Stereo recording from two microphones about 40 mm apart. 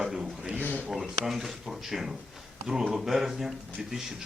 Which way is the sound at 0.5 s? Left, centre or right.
Left.